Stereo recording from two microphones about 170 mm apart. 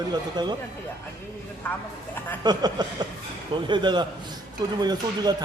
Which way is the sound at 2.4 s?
25° right (ahead or behind).